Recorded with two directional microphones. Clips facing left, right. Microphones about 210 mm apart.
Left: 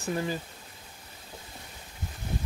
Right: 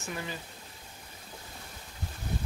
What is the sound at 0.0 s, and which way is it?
Speech, 35° left (ahead or behind).